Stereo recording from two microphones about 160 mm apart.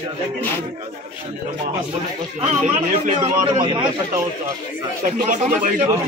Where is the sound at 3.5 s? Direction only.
30° right (ahead or behind).